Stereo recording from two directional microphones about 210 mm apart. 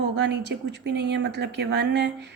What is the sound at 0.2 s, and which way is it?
Speech, 55° right (ahead or behind).